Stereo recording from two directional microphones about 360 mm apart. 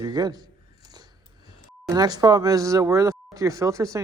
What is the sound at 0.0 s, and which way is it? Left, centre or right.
Speech, centre.